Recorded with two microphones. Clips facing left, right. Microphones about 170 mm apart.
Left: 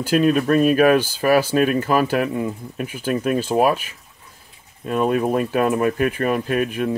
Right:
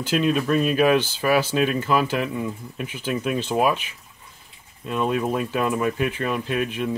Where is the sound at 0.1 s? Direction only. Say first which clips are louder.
Left 4 dB; 50° left (ahead or behind).